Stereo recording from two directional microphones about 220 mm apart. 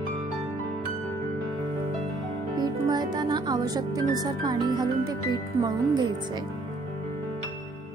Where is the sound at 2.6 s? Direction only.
15° right (ahead or behind).